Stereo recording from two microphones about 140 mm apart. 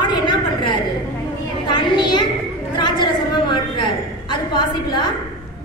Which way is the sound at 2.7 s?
35° left (ahead or behind).